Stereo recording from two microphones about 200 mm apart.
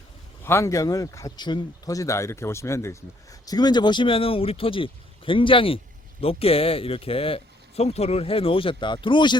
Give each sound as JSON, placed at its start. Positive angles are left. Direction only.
{"t": 0.4, "sound": "speech", "side_deg": 15}